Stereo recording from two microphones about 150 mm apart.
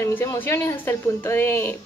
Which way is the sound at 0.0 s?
20° left (ahead or behind).